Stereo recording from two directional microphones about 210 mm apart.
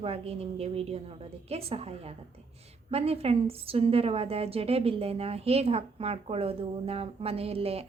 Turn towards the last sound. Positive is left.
turn(degrees=-30)  # may be behind; listen again after turning